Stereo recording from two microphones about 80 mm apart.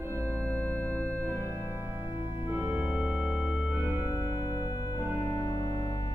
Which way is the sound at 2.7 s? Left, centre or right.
Right.